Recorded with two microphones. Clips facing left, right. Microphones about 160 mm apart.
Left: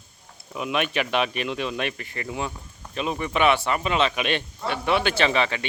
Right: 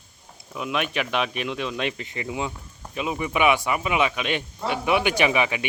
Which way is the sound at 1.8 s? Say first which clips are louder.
Right 1 dB; 20° right (ahead or behind).